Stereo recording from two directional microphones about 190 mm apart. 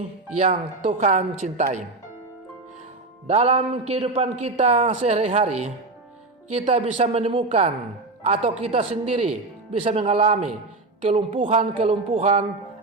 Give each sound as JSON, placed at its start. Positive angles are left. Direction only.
{"t": 0.3, "sound": "a man's voice", "side_deg": -35}
{"t": 3.2, "sound": "a man's voice", "side_deg": -35}